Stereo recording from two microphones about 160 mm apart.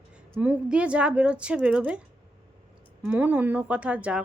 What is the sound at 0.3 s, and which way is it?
Speech, 10° right (ahead or behind).